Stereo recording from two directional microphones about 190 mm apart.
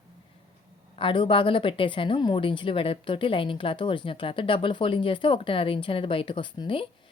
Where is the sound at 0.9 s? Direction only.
25° left (ahead or behind).